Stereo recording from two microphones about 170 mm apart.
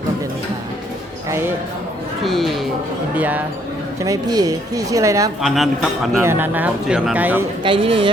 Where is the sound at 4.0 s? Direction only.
20° right (ahead or behind).